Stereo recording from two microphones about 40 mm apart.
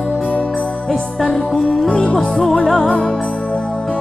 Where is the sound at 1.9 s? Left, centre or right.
Left.